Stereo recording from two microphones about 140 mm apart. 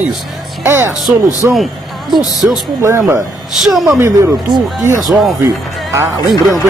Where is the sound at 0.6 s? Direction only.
15° right (ahead or behind).